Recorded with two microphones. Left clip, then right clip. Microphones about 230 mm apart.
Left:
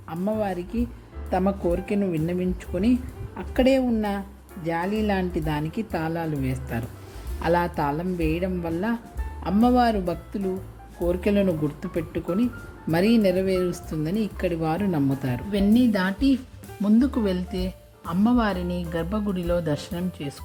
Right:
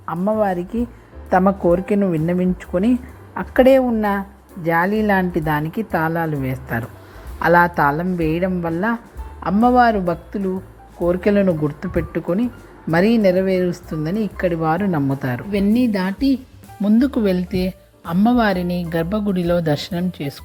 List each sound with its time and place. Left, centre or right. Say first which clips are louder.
0.1 s speech: right 8 dB; centre
1.3 s speech: right 9 dB; centre